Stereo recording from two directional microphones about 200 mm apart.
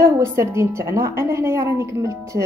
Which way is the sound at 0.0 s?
15° right (ahead or behind).